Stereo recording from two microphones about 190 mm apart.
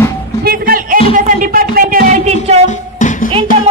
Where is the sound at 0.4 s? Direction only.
55° right (ahead or behind).